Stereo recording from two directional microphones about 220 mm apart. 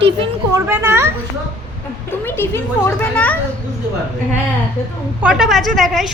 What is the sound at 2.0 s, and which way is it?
A child's voice, 10° left (ahead or behind).